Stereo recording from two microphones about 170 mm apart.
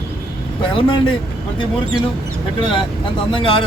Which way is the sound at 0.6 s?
30° left (ahead or behind).